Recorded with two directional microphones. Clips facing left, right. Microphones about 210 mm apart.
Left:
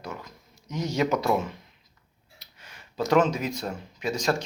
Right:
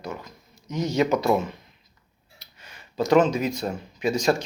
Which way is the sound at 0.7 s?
10° left (ahead or behind).